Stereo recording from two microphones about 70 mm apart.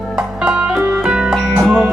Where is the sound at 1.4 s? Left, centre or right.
Centre.